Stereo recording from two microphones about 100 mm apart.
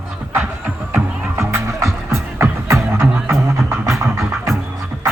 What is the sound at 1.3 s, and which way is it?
Music, 30° right (ahead or behind).